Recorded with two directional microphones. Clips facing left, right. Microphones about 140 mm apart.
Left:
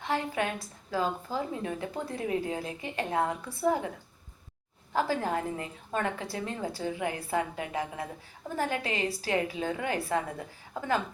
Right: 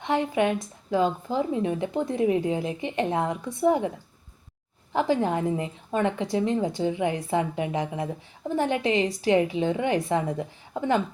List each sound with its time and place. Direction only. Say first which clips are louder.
0.0 s speech: right 7 dB; 20° right (ahead or behind)
4.9 s speech: right 5 dB; 20° right (ahead or behind)